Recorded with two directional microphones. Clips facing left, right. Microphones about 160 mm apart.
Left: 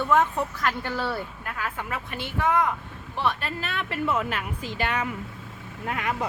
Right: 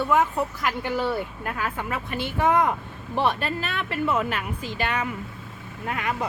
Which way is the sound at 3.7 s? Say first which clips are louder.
Even; 50° right (ahead or behind).